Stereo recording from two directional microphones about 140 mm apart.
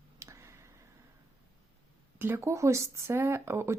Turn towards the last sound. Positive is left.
turn(degrees=-20)  # may be behind; listen again after turning